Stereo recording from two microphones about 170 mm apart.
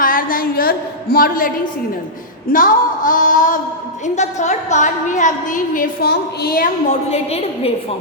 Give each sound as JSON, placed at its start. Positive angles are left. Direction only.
{"t": 0.0, "sound": "a sound", "side_deg": 55}
{"t": 2.5, "sound": "a woman's voice", "side_deg": 55}
{"t": 7.1, "sound": "a woman's voice", "side_deg": 35}